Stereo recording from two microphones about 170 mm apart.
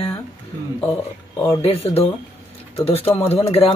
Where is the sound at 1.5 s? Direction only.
35° left (ahead or behind).